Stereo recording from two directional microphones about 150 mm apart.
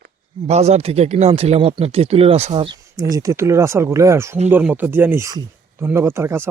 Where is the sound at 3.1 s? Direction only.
20° right (ahead or behind).